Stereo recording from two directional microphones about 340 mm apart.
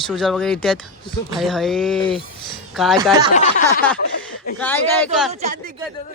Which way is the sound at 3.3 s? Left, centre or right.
Left.